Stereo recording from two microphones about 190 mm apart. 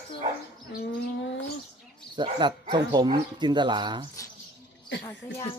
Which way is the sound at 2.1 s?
25° right (ahead or behind).